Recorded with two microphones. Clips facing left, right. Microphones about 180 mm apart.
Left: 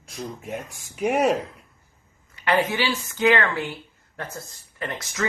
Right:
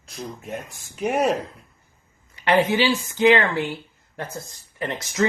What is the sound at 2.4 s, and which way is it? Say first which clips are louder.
Speech: right 4 dB; 20° right (ahead or behind).